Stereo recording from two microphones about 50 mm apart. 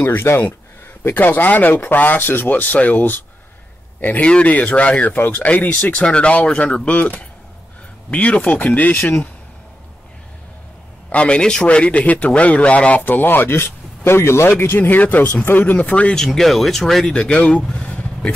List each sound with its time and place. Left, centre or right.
0.0 s speech: left
2.5 s speech: left
11.1 s speech: left
13.0 s speech: left
16.3 s speech: centre
17.1 s speech: left
17.6 s vehicle: centre